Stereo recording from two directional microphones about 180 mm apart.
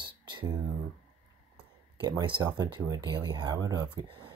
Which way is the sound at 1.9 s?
25° right (ahead or behind).